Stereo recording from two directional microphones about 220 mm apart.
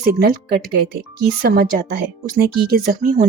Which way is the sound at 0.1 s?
45° right (ahead or behind).